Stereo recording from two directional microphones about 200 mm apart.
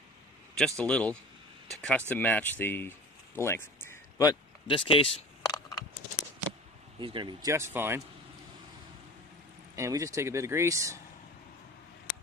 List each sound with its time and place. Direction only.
0.7 s a man's voice: 5° left (ahead or behind)
3.3 s a sound: 10° left (ahead or behind)
7.0 s speech: 25° right (ahead or behind)
9.8 s speech: 15° right (ahead or behind)